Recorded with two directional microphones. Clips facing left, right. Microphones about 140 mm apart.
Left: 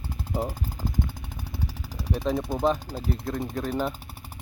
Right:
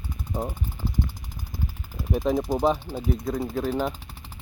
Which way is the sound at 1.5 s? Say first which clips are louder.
Right 1 dB; 80° left.